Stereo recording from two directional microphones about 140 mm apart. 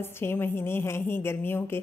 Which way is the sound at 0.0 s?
15° left (ahead or behind).